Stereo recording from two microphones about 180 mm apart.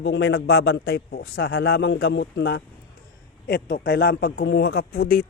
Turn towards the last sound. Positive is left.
turn(degrees=60)  # may be behind; listen again after turning